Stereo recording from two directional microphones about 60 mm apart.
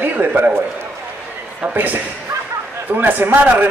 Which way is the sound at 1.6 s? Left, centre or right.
Right.